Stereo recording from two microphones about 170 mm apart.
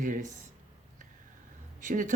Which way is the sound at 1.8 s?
50° right (ahead or behind).